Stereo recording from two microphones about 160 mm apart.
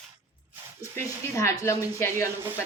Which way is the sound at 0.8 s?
20° left (ahead or behind).